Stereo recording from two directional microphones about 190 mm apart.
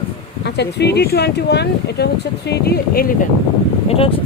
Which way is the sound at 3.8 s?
30° left (ahead or behind).